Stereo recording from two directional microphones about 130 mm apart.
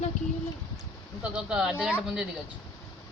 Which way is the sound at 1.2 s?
5° right (ahead or behind).